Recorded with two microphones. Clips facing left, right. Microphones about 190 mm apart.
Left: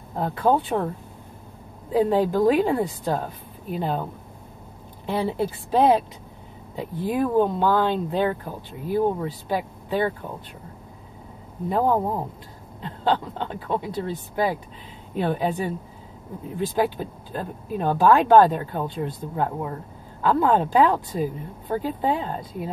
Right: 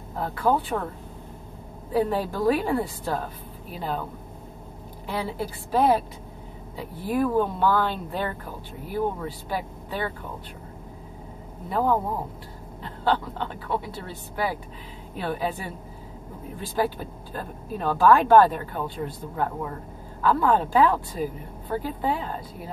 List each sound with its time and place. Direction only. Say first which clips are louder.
0.2 s speech: left 3 dB; 25° left (ahead or behind)
1.9 s speech: left 4 dB; 20° left (ahead or behind)
5.0 s speech: left 5 dB; 25° left (ahead or behind)
9.5 s speech: left 6 dB; 20° left (ahead or behind)
11.7 s speech: left 2 dB; 20° left (ahead or behind)